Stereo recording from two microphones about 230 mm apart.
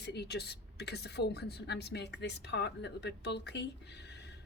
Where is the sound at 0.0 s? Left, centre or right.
Left.